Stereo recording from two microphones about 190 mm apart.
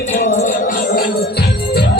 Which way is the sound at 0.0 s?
40° left (ahead or behind).